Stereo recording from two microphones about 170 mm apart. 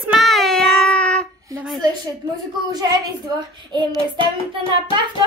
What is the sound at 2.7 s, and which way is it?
Speech, 25° right (ahead or behind).